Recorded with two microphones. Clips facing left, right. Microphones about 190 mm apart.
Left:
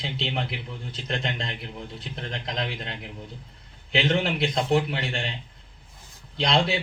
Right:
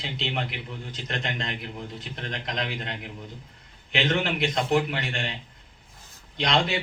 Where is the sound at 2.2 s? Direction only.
30° left (ahead or behind).